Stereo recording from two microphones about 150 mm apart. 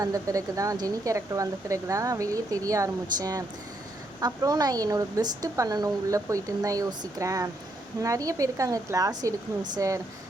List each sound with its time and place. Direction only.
0.0 s speech: 25° right (ahead or behind)